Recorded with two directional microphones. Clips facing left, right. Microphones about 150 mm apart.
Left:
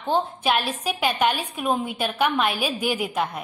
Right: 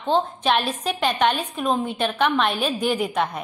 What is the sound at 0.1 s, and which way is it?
A woman's voice, 10° left (ahead or behind).